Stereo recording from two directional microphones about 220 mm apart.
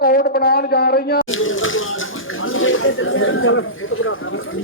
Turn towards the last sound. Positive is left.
turn(degrees=65)  # may be behind; listen again after turning